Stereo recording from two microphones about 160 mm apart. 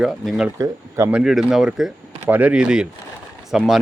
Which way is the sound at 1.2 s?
Centre (ahead or behind).